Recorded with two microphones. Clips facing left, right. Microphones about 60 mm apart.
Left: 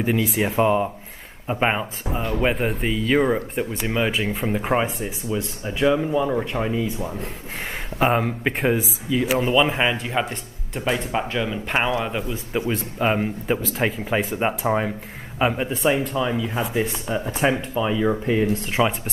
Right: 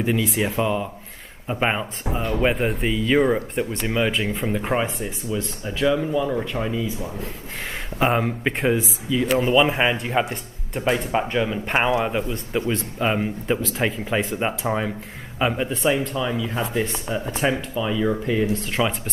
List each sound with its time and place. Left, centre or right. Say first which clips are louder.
0.0 s speech: left 1 dB; centre
0.6 s speech: left 6 dB; left
1.5 s speech: left 1 dB; centre
8.0 s speech: left 1 dB; centre
12.5 s speech: even; centre
17.7 s speech: left 1 dB; centre
18.7 s speech: left 2 dB; centre